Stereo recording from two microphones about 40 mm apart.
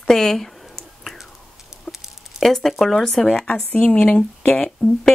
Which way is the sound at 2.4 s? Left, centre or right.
Centre.